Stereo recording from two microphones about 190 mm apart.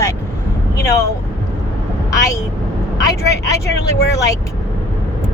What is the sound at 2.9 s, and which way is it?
Speech, 15° left (ahead or behind).